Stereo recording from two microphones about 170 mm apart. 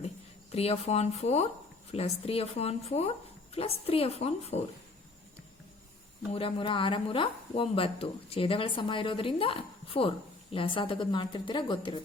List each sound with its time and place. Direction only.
0.5 s speech: 35° left (ahead or behind)
6.3 s speech: 30° left (ahead or behind)